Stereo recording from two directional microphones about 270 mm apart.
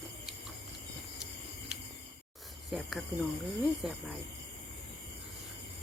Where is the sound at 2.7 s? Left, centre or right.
Centre.